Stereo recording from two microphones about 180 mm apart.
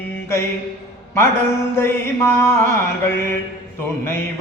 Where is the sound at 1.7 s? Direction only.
15° left (ahead or behind).